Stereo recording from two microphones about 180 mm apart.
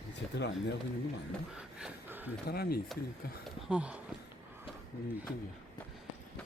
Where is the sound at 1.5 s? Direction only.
5° right (ahead or behind).